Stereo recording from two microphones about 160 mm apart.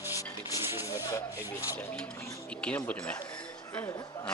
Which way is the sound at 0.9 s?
20° left (ahead or behind).